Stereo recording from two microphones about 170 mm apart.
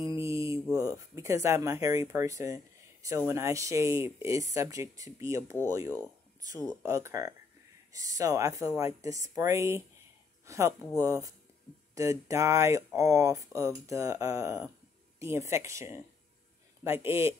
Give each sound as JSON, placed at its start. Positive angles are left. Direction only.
{"t": 0.0, "sound": "speech", "side_deg": -20}